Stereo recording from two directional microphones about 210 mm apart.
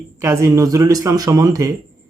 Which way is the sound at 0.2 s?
15° right (ahead or behind).